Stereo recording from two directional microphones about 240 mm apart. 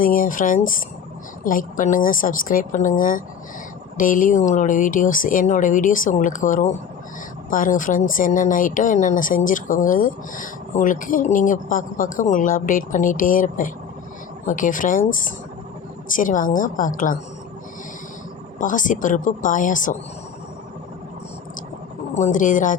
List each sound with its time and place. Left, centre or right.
0.0 s speech: left
18.6 s speech: left
22.1 s speech: left